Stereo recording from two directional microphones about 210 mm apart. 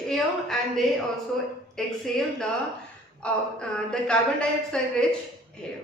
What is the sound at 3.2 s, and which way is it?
A woman's voice, 5° left (ahead or behind).